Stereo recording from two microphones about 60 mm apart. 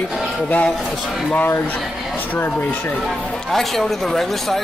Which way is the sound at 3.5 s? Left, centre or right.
Centre.